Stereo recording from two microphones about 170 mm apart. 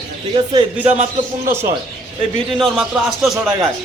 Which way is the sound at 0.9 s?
40° right (ahead or behind).